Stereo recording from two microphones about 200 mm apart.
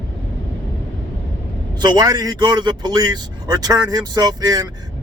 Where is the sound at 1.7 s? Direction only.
20° right (ahead or behind).